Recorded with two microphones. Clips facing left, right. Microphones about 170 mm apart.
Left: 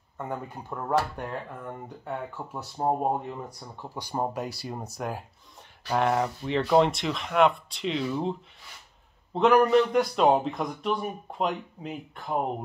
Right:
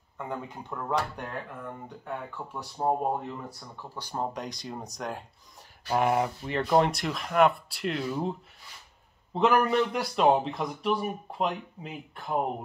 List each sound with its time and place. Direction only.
0.3 s speech: 5° left (ahead or behind)
2.0 s speech: 10° left (ahead or behind)
5.9 s speech: 5° right (ahead or behind)